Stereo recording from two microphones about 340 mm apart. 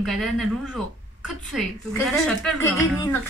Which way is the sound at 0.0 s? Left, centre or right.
Centre.